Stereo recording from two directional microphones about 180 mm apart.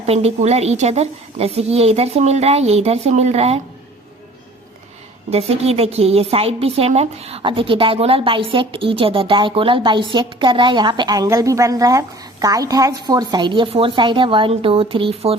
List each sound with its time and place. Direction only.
0.0 s a woman's voice: 35° right (ahead or behind)
5.3 s a woman's voice: 35° right (ahead or behind)